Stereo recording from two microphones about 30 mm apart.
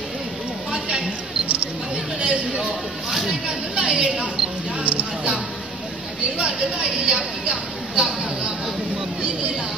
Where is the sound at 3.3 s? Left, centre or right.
Right.